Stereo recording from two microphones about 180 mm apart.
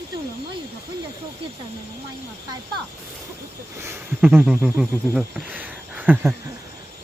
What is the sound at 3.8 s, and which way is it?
Speech, 10° right (ahead or behind).